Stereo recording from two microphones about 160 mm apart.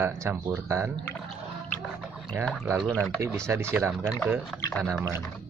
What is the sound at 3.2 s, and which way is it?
Speech, 15° right (ahead or behind).